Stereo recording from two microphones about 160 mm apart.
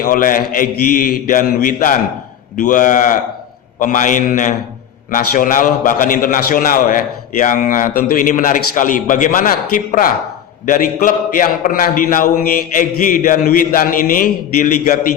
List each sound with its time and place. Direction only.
0.0 s a man's voice: 60° left (ahead or behind)